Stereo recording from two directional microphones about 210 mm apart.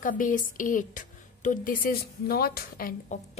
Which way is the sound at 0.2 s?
40° left (ahead or behind).